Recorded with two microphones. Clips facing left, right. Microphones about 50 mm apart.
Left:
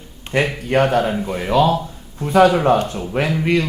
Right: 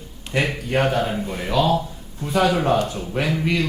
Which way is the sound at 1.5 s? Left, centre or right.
Left.